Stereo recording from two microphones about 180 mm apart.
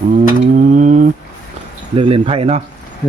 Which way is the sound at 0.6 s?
45° right (ahead or behind).